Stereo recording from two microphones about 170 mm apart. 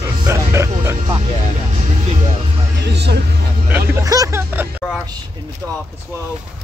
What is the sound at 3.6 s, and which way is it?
Speech, 15° right (ahead or behind).